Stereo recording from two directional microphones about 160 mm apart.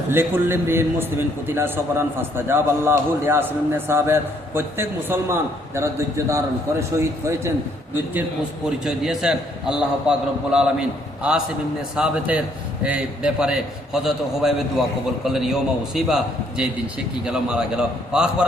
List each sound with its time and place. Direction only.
0.1 s a man's voice: 15° right (ahead or behind)
8.8 s a man's voice: 5° right (ahead or behind)